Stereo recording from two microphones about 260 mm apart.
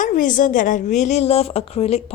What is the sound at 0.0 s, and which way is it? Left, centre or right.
A woman's voice, left.